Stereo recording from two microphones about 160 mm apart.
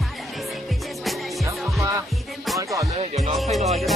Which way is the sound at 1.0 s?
Centre (ahead or behind).